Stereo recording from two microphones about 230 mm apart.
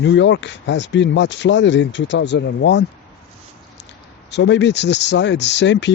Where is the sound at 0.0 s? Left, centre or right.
Left.